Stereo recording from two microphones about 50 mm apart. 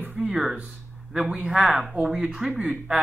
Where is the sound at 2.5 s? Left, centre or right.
Right.